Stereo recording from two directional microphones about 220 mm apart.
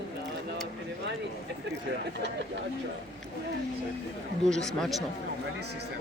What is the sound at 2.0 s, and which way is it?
Speech, 55° right (ahead or behind).